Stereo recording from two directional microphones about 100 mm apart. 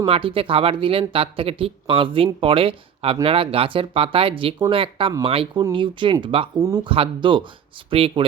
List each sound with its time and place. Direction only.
0.0 s speech: 65° right (ahead or behind)
5.7 s speech: 55° right (ahead or behind)